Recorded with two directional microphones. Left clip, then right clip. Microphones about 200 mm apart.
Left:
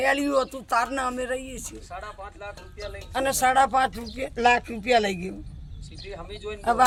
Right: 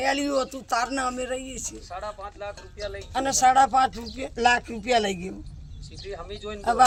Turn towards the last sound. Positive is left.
turn(degrees=-45)  # may be behind; listen again after turning